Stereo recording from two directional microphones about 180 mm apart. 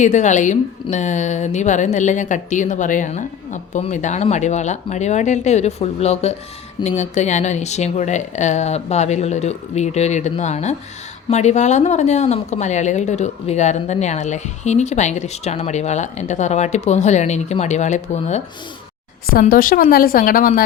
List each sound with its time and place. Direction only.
0.0 s speech: 40° left (ahead or behind)
19.3 s a woman's voice: 50° left (ahead or behind)